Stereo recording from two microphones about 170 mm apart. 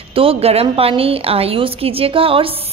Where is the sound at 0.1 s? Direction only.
35° right (ahead or behind).